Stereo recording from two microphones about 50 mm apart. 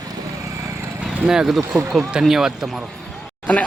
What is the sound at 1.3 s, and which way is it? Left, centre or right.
Speech, centre.